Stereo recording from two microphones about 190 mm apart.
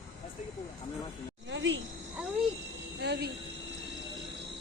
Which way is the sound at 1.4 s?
75° right (ahead or behind).